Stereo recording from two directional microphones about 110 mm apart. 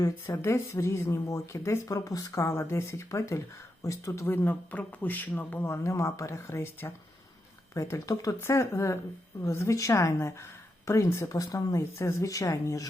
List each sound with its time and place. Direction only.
0.0 s speech: 25° left (ahead or behind)